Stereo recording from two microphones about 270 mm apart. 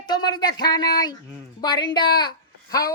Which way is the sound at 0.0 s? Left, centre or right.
Centre.